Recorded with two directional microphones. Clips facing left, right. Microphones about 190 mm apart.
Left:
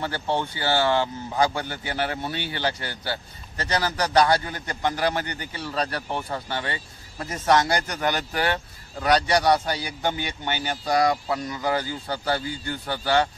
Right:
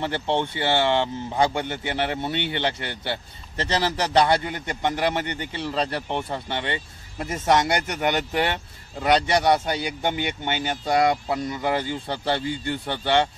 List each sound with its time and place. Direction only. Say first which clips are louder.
0.0 s a man's voice: right 2 dB; 25° right (ahead or behind)